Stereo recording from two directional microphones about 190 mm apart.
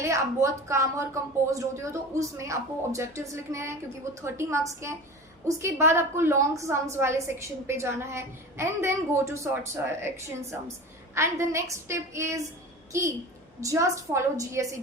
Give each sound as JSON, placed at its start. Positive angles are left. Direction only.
{"t": 0.0, "sound": "a woman's voice", "side_deg": -15}
{"t": 11.1, "sound": "a woman's voice", "side_deg": -15}